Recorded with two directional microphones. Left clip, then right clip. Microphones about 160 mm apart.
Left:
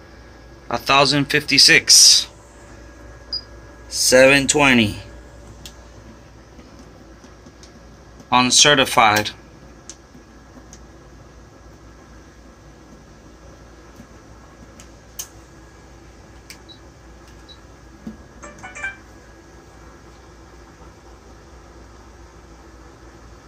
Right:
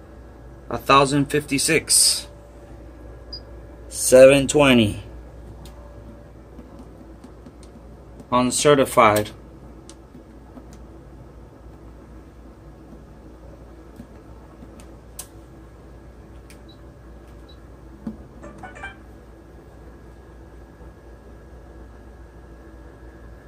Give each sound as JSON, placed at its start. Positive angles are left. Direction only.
{"t": 0.7, "sound": "a man's voice", "side_deg": 5}
{"t": 4.1, "sound": "speech", "side_deg": 45}
{"t": 8.3, "sound": "speech", "side_deg": 10}